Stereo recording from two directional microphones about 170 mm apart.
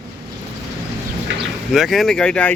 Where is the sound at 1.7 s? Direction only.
Centre (ahead or behind).